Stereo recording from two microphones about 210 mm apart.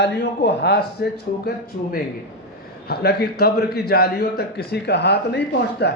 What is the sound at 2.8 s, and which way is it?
A man's voice, 50° left (ahead or behind).